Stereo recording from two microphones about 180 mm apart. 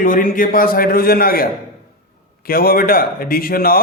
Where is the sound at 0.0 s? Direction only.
50° left (ahead or behind).